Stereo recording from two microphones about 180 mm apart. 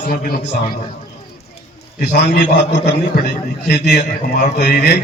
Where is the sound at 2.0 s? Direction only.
55° left (ahead or behind).